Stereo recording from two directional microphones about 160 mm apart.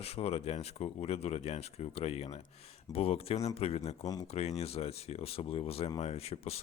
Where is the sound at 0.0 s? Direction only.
40° left (ahead or behind).